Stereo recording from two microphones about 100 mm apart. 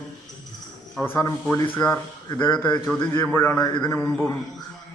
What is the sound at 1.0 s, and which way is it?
Speech, 25° left (ahead or behind).